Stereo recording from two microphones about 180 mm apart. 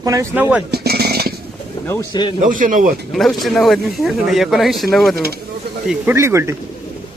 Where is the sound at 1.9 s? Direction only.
25° left (ahead or behind).